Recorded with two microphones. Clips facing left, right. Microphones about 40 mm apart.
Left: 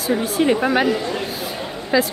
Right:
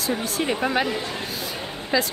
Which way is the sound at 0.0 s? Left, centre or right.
Centre.